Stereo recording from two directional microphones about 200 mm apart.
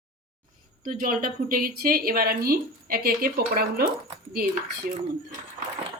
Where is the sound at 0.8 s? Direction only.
45° right (ahead or behind).